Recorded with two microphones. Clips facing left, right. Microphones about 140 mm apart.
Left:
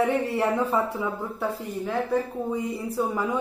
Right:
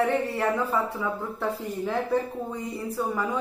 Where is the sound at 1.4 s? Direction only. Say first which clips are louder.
Even; centre (ahead or behind).